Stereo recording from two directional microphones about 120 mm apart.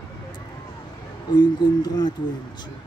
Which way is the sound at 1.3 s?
35° left (ahead or behind).